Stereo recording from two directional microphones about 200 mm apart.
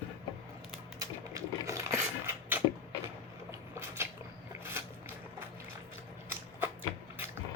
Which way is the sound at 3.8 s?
10° right (ahead or behind).